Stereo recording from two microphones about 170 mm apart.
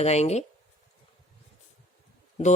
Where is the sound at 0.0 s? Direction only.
40° left (ahead or behind).